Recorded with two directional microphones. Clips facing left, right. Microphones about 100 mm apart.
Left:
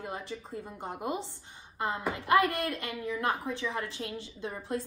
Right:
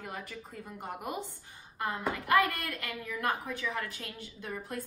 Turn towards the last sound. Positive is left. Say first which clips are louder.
# left 4 dB
turn(degrees=25)  # may be behind; listen again after turning